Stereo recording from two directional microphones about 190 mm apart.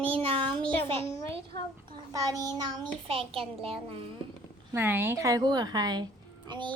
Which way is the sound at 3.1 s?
30° right (ahead or behind).